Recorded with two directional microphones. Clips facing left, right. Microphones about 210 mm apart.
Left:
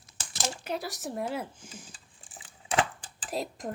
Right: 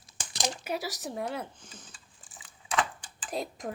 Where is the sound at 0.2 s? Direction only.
15° right (ahead or behind).